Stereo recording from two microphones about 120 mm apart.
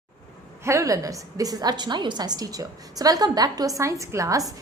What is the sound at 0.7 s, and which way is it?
A woman's voice, 25° right (ahead or behind).